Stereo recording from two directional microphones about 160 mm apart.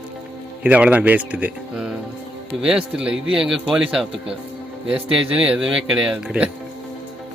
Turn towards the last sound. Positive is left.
turn(degrees=-5)  # may be behind; listen again after turning